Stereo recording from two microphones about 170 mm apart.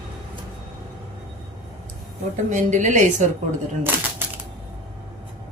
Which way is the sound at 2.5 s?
45° right (ahead or behind).